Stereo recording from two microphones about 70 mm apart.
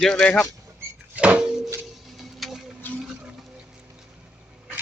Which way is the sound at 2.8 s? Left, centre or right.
Left.